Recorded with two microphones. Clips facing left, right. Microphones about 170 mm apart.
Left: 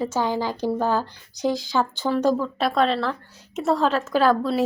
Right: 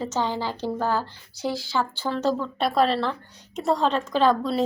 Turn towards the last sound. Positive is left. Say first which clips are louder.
# left 1 dB
turn(degrees=5)  # may be behind; listen again after turning